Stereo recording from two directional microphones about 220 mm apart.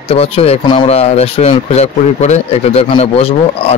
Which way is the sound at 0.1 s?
25° left (ahead or behind).